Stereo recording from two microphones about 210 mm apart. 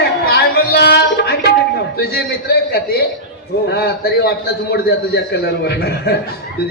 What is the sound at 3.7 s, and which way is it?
A man's voice, 50° left (ahead or behind).